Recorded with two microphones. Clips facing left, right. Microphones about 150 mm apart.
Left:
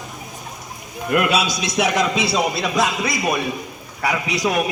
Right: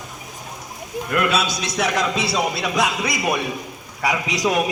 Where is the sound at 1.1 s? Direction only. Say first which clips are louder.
Left 2 dB; 15° left (ahead or behind).